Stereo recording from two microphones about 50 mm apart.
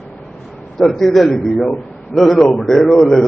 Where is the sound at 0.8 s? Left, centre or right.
Centre.